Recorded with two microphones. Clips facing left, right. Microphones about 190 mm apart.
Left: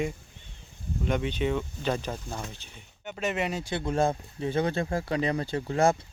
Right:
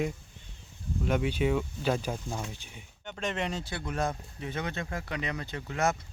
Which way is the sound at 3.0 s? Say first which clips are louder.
Left 3 dB; 10° left (ahead or behind).